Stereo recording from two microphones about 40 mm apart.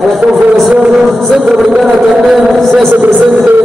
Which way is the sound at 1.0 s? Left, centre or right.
Centre.